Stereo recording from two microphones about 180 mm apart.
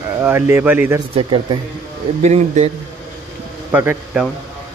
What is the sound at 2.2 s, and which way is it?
Speech, 40° right (ahead or behind).